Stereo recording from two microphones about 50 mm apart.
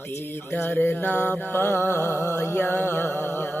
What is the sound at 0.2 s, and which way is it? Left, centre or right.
Mantra, left.